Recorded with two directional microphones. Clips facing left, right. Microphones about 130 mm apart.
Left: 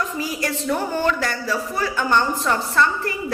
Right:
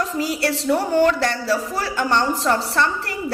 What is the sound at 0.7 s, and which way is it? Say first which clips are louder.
Speech: right 5 dB; 35° right (ahead or behind).